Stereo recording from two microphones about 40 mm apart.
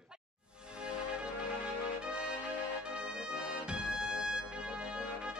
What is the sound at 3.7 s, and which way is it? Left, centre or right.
Music, right.